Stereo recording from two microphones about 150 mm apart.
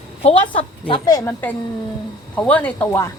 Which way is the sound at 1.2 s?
15° left (ahead or behind).